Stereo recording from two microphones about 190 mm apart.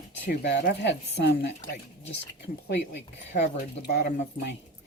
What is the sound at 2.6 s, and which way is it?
Speech, 65° left (ahead or behind).